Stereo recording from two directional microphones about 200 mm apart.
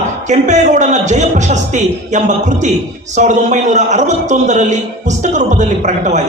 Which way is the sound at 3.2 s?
35° right (ahead or behind).